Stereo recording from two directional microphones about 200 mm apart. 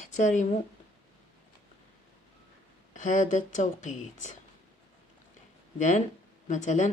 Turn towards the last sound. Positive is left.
turn(degrees=35)  # may be behind; listen again after turning